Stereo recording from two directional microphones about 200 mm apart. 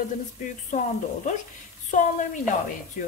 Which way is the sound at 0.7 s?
35° left (ahead or behind).